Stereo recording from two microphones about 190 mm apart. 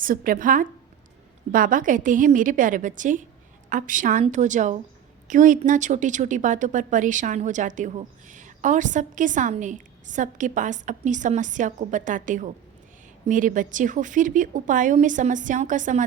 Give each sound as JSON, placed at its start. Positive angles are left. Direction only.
{"t": 0.0, "sound": "a woman's voice", "side_deg": -45}